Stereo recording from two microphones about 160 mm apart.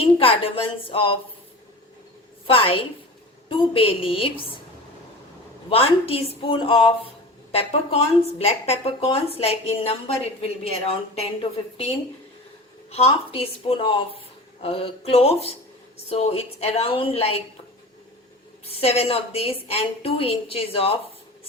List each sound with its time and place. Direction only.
0.0 s speech: 35° left (ahead or behind)
2.5 s speech: 35° left (ahead or behind)
5.6 s speech: 35° left (ahead or behind)
12.9 s speech: 40° left (ahead or behind)
18.6 s speech: 40° left (ahead or behind)